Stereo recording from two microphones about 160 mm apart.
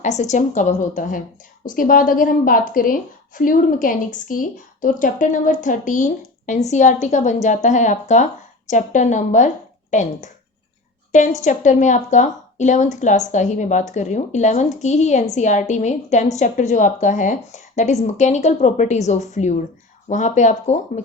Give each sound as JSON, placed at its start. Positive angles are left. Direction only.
{"t": 0.0, "sound": "a woman's voice", "side_deg": 45}